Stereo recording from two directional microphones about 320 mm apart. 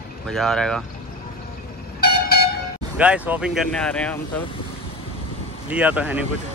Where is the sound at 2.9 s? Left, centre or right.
Centre.